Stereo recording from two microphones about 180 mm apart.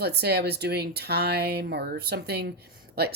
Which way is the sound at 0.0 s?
65° right (ahead or behind).